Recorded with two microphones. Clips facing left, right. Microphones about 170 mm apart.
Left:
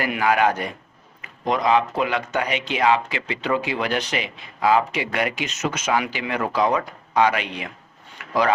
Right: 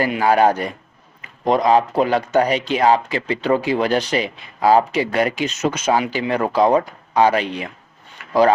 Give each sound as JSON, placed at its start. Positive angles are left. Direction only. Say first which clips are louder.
{"t": 0.0, "sound": "speech", "louder": "right 4 dB", "side_deg": -30}